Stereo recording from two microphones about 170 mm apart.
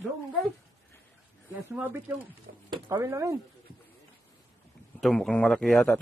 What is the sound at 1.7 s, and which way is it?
Speech, 10° right (ahead or behind).